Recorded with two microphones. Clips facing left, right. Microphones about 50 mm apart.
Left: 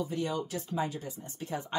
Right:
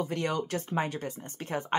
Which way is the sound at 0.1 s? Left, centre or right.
Right.